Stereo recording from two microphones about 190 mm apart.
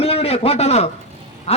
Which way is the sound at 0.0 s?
30° left (ahead or behind).